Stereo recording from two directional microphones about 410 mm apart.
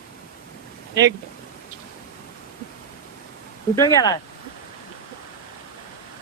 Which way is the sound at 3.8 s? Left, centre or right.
Centre.